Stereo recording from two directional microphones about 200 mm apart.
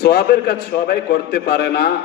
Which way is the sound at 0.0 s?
50° left (ahead or behind).